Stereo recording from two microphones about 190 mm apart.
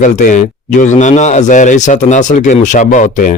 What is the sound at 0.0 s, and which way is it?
Speech, 40° left (ahead or behind).